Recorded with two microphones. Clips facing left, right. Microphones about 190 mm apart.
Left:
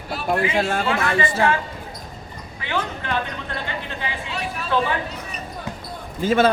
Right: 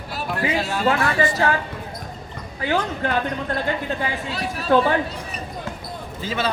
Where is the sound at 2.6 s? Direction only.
40° right (ahead or behind).